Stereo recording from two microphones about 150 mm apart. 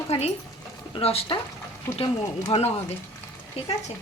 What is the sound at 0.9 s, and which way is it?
Speech, 35° left (ahead or behind).